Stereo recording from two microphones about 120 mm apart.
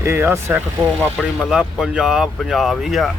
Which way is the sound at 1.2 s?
5° right (ahead or behind).